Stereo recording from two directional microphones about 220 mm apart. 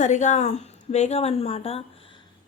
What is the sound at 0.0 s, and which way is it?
Speech, 35° left (ahead or behind).